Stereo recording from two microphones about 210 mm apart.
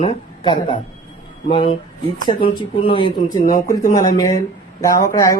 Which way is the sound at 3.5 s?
40° left (ahead or behind).